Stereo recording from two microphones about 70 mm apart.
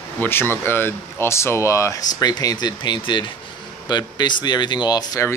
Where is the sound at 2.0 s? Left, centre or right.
Left.